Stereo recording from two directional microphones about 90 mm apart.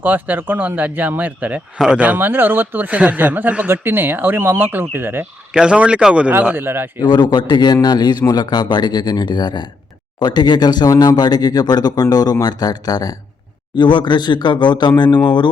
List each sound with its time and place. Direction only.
0.0 s speech: 20° right (ahead or behind)
5.5 s speech: 10° right (ahead or behind)
7.0 s speech: 55° left (ahead or behind)
13.7 s speech: 55° left (ahead or behind)